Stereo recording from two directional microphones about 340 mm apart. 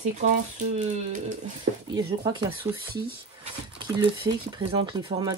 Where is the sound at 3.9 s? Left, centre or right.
Centre.